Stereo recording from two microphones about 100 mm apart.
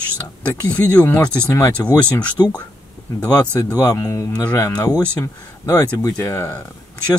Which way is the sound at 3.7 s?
35° left (ahead or behind).